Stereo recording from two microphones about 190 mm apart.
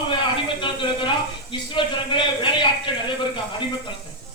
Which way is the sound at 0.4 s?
25° left (ahead or behind).